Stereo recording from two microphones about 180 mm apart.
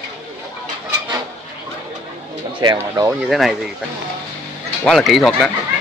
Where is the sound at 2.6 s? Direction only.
20° right (ahead or behind).